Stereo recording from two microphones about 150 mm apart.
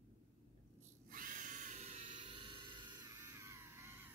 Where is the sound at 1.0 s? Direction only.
65° right (ahead or behind); by 4.1 s 15° right (ahead or behind).